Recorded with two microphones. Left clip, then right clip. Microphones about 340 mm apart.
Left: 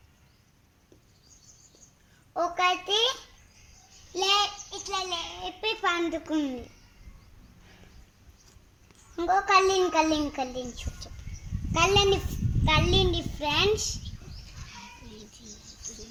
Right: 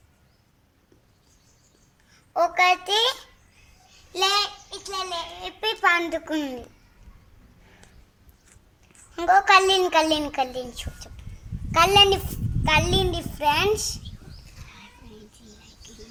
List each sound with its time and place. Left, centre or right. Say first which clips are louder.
2.3 s a child's voice: right 6 dB; right
4.1 s child singing: right 2 dB; right
5.5 s a sound: right 7 dB; right
9.3 s a woman's voice: right 6 dB; right
11.7 s a woman's voice: right 6 dB; right